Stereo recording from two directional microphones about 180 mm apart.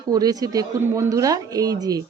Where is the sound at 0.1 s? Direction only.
20° right (ahead or behind).